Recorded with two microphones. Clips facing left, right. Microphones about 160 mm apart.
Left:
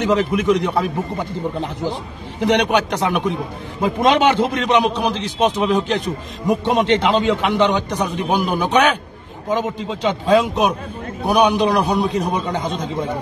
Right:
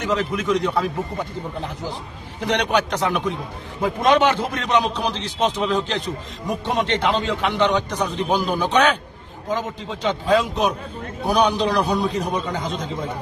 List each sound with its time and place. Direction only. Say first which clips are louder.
0.0 s a man's voice: left 6 dB; 20° left (ahead or behind)
2.4 s a man's voice: left 4 dB; 20° left (ahead or behind)